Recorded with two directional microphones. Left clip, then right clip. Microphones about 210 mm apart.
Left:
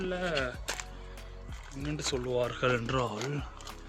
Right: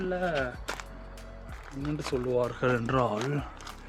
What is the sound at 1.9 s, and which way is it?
Speech, 30° right (ahead or behind).